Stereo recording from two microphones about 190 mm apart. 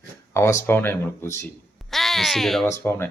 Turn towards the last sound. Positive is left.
turn(degrees=15)  # may be behind; listen again after turning